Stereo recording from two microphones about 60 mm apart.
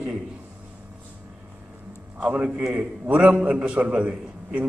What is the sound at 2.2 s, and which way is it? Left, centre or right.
A man's voice, centre.